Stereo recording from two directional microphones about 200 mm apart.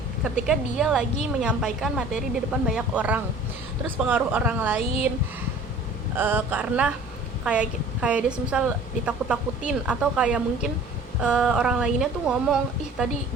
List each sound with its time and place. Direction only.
0.3 s a woman's voice: centre (ahead or behind)
6.1 s a woman's voice: 10° right (ahead or behind)